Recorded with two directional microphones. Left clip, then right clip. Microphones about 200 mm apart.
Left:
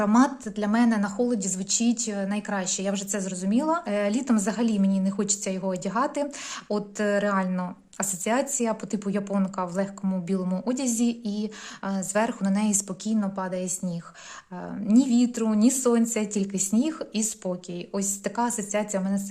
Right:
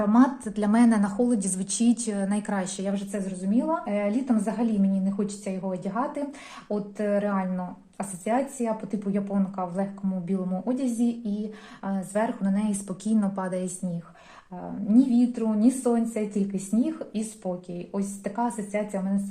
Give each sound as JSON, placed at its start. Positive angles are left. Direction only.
{"t": 0.0, "sound": "a woman's voice", "side_deg": 35}
{"t": 0.4, "sound": "a woman's voice", "side_deg": 15}
{"t": 2.8, "sound": "a woman's voice", "side_deg": 40}
{"t": 13.1, "sound": "a woman's voice", "side_deg": 20}
{"t": 14.8, "sound": "speech", "side_deg": 45}